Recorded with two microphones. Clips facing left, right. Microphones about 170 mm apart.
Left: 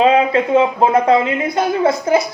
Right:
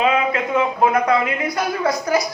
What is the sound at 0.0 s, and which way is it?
Speech, 35° left (ahead or behind).